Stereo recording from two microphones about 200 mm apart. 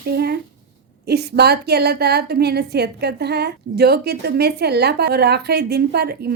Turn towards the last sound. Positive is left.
turn(degrees=-55)  # may be behind; listen again after turning